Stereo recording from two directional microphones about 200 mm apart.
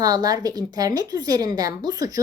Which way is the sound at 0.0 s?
20° right (ahead or behind).